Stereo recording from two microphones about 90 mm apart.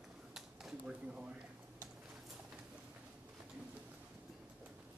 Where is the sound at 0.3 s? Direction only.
5° right (ahead or behind).